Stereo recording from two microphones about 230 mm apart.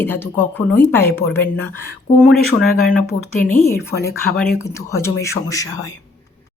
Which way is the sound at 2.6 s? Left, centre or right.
Left.